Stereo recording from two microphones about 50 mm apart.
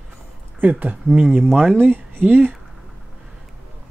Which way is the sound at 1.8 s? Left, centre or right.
Right.